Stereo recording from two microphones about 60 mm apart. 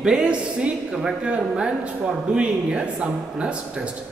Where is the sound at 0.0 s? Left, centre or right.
Centre.